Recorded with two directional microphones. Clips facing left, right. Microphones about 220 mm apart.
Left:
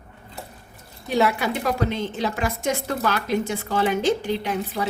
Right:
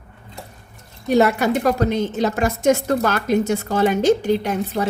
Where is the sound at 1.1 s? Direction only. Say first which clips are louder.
Right 6 dB; 45° right (ahead or behind).